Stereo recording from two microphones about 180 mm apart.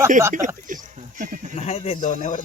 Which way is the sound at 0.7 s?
45° right (ahead or behind).